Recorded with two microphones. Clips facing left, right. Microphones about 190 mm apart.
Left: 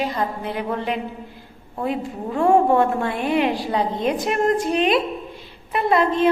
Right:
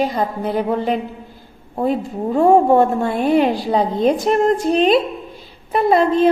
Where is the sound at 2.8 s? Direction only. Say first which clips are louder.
Right 4 dB; 40° right (ahead or behind).